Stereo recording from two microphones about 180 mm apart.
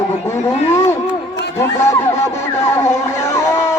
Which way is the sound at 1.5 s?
15° left (ahead or behind).